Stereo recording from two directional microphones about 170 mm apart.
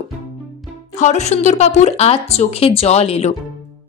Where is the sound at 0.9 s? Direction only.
45° left (ahead or behind).